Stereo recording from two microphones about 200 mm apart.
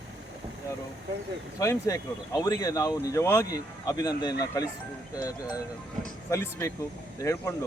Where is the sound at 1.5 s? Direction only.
15° left (ahead or behind).